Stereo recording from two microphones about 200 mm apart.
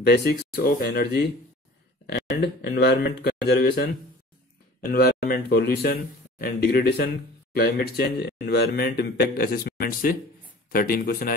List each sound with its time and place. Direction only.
0.0 s speech: 50° left (ahead or behind)
4.9 s speech: 50° left (ahead or behind)